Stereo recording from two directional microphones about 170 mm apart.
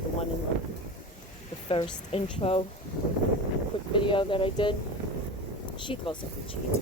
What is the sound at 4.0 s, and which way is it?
Speech, 30° left (ahead or behind).